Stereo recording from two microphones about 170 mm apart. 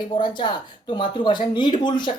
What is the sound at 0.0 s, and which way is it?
Speech, 25° left (ahead or behind).